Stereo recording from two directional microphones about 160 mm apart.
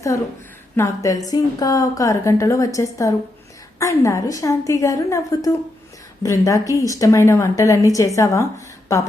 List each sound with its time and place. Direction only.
0.8 s speech: 20° left (ahead or behind)